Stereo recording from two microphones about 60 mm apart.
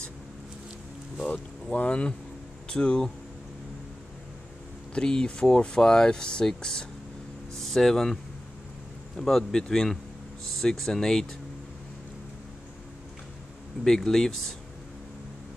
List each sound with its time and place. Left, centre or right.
1.3 s speech: left
4.9 s speech: centre
13.8 s speech: centre